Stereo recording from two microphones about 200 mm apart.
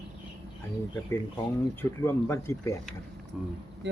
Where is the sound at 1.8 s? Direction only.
10° left (ahead or behind).